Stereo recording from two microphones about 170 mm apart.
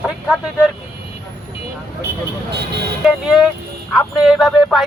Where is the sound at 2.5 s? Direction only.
75° right (ahead or behind).